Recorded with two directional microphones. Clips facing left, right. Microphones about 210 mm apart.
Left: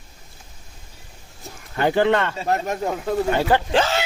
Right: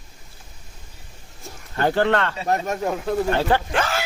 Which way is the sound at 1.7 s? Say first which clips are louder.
Left 1 dB; 15° left (ahead or behind).